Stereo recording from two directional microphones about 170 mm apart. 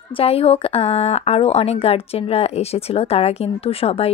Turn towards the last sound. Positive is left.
turn(degrees=35)  # may be behind; listen again after turning